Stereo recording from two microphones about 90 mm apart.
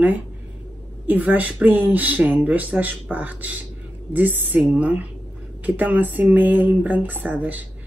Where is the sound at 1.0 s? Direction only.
20° right (ahead or behind).